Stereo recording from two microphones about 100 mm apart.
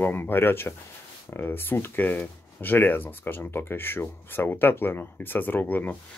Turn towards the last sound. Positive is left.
turn(degrees=20)  # may be behind; listen again after turning